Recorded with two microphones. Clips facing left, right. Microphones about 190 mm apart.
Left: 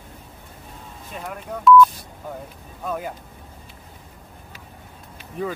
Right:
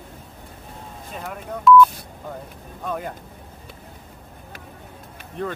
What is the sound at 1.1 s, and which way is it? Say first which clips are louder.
Speech: even; centre (ahead or behind).